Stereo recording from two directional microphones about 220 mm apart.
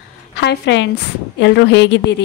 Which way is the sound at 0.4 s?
50° left (ahead or behind).